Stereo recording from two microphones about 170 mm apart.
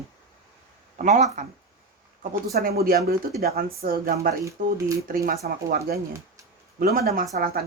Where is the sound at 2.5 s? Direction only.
60° right (ahead or behind).